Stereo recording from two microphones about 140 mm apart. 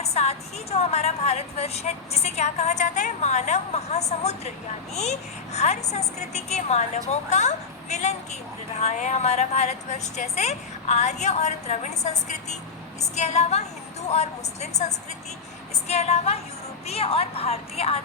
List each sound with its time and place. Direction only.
0.0 s a woman's voice: 50° left (ahead or behind)